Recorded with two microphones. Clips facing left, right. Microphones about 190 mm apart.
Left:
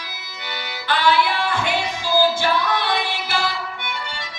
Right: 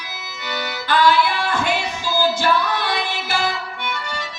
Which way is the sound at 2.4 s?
45° right (ahead or behind).